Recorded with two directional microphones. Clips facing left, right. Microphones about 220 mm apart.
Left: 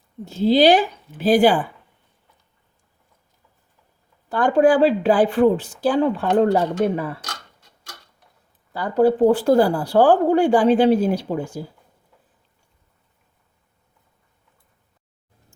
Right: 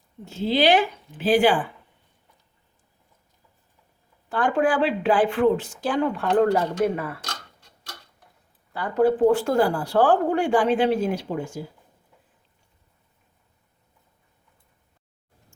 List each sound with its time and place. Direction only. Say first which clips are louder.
0.3 s a woman's voice: left 5 dB; 35° left (ahead or behind)
4.3 s a woman's voice: left 6 dB; 40° left (ahead or behind)
8.7 s a woman's voice: left 3 dB; 35° left (ahead or behind)